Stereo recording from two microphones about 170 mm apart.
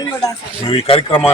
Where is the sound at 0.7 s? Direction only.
30° left (ahead or behind).